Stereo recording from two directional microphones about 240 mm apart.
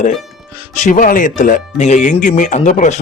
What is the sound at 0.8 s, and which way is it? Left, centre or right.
Speech, left.